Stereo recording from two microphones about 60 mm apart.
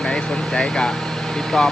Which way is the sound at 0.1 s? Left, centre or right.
Centre.